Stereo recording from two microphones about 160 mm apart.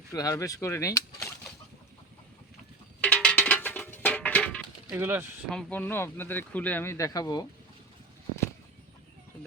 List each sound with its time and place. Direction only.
0.1 s speech: 20° left (ahead or behind)
3.0 s a sound: 5° left (ahead or behind)
4.9 s speech: 10° right (ahead or behind)
5.5 s speech: 5° left (ahead or behind); by 7.4 s 25° left (ahead or behind)